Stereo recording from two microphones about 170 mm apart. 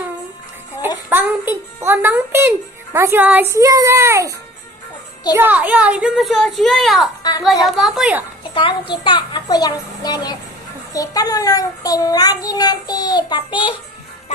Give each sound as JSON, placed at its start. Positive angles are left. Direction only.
{"t": 1.1, "sound": "a child's voice", "side_deg": -10}
{"t": 5.4, "sound": "speech", "side_deg": -10}
{"t": 7.2, "sound": "a woman's voice", "side_deg": 25}
{"t": 7.6, "sound": "speech", "side_deg": 0}
{"t": 8.5, "sound": "child singing", "side_deg": 30}